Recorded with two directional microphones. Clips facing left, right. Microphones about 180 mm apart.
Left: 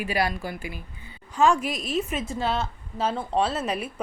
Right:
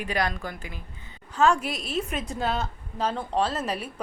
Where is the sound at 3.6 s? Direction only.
35° right (ahead or behind).